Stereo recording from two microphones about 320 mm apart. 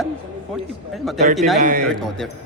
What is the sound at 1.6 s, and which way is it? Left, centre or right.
Speech, right.